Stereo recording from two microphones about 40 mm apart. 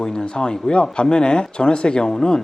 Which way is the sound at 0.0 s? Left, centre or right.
Centre.